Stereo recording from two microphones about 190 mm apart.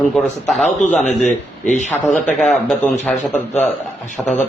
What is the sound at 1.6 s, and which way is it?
Speech, 40° left (ahead or behind).